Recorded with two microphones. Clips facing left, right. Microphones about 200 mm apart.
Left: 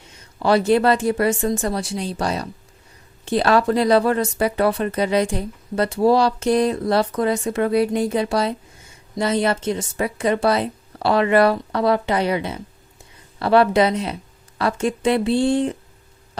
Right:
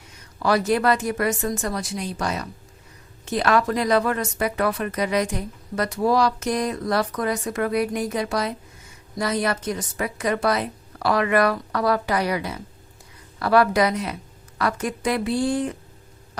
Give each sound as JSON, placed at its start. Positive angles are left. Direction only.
{"t": 0.0, "sound": "speech", "side_deg": 25}